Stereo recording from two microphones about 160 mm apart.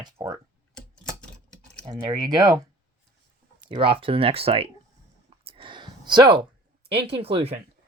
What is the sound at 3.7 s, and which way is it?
Speech, 35° right (ahead or behind).